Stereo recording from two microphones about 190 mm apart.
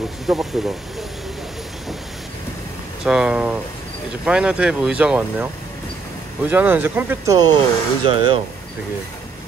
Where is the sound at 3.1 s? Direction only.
5° right (ahead or behind).